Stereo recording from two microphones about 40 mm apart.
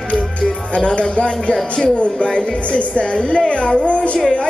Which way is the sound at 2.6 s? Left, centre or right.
Left.